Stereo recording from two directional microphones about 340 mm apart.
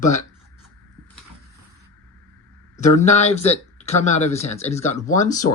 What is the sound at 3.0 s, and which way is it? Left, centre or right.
Speech, centre.